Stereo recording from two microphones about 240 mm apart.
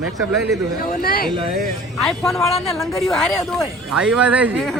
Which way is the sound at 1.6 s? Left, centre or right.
Centre.